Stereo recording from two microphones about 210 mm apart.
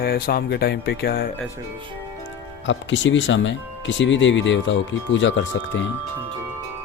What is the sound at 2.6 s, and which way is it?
Speech, 60° left (ahead or behind).